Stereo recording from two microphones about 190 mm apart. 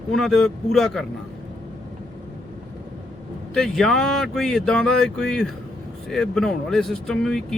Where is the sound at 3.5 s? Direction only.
Centre (ahead or behind).